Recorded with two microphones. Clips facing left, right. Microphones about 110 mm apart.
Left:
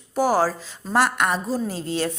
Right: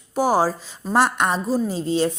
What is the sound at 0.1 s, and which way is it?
A woman's voice, 15° right (ahead or behind).